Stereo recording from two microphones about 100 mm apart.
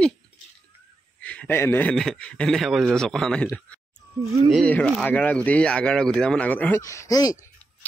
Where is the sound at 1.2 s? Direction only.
15° left (ahead or behind).